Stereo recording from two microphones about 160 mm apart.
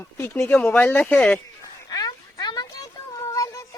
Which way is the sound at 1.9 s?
25° left (ahead or behind).